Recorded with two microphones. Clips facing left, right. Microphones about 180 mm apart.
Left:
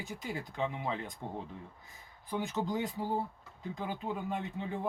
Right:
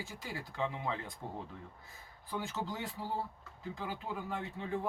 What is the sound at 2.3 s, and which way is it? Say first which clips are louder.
Speech: left 5 dB; 20° left (ahead or behind).